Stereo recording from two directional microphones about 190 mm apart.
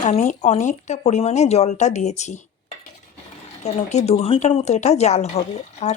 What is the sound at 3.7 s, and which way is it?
Speech, 35° left (ahead or behind).